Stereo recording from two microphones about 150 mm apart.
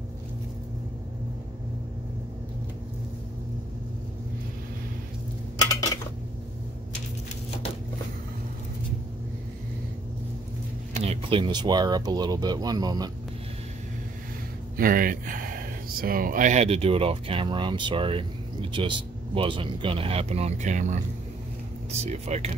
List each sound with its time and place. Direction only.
5.6 s dishes: 25° left (ahead or behind)
10.9 s a sound: 50° right (ahead or behind)
11.2 s speech: 35° right (ahead or behind)
14.8 s speech: 70° right (ahead or behind); by 21.0 s 55° right (ahead or behind)
22.0 s speech: 45° right (ahead or behind)